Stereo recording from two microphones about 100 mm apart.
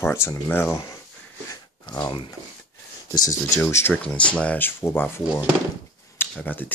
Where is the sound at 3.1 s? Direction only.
40° left (ahead or behind).